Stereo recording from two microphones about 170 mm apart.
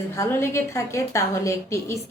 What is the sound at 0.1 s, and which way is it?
A woman's voice, 15° left (ahead or behind).